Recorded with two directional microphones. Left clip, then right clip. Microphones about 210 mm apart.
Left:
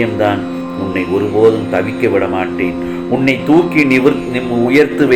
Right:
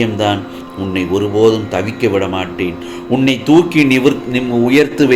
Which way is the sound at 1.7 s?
55° right (ahead or behind).